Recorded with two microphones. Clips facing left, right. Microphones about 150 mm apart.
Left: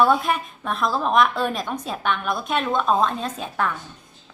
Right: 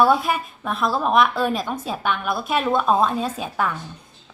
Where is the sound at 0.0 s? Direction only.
5° right (ahead or behind).